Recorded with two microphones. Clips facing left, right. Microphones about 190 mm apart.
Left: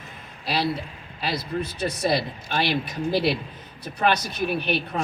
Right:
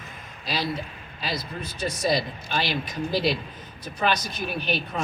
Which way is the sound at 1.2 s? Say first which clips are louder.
Left 5 dB; 60° left (ahead or behind).